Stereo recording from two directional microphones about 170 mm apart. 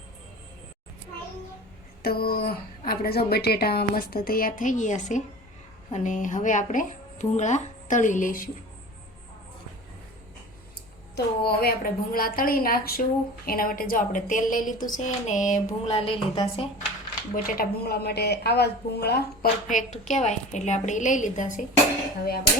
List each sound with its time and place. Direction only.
2.0 s a woman's voice: 65° left (ahead or behind)
11.1 s a woman's voice: 65° left (ahead or behind); by 16.6 s 30° left (ahead or behind)
17.3 s a woman's voice: 55° left (ahead or behind)
19.6 s speech: 45° left (ahead or behind)